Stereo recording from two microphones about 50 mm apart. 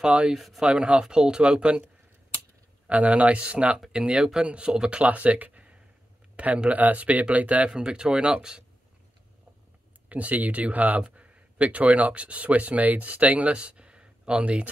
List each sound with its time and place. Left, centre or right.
0.0 s speech: right
0.3 s speech: centre
0.7 s speech: right
2.9 s speech: right
5.1 s speech: right
7.7 s speech: centre
10.0 s speech: right